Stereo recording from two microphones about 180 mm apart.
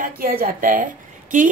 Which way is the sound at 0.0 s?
50° right (ahead or behind).